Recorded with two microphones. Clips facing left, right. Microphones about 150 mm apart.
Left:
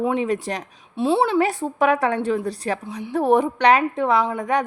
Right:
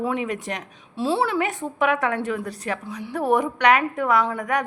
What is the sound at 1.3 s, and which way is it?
A woman's voice, 35° left (ahead or behind).